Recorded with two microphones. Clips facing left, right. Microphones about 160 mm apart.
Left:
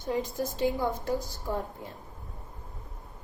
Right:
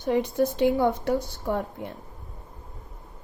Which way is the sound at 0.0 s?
70° right (ahead or behind).